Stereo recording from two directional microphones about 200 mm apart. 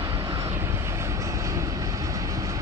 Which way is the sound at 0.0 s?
15° right (ahead or behind).